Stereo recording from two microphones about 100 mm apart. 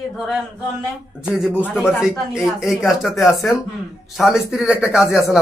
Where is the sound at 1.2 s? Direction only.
5° right (ahead or behind).